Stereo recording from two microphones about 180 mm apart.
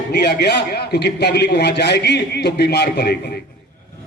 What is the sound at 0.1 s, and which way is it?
A man's voice, 65° left (ahead or behind).